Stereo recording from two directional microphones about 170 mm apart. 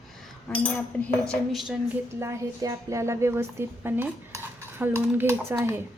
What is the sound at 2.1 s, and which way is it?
A woman's voice, 15° right (ahead or behind).